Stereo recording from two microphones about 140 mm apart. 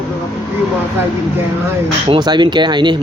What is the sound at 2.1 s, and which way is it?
Speech, 30° right (ahead or behind).